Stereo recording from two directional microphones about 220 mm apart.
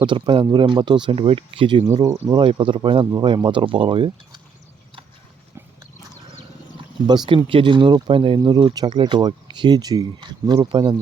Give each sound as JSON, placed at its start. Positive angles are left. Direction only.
{"t": 0.0, "sound": "speech", "side_deg": -20}
{"t": 7.3, "sound": "speech", "side_deg": -20}